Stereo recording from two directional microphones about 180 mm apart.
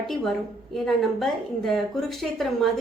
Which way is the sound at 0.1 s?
Centre (ahead or behind).